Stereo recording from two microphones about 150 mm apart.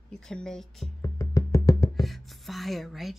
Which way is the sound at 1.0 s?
20° left (ahead or behind).